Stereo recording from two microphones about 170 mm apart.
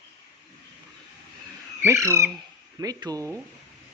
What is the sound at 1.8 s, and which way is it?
Speech, 15° right (ahead or behind).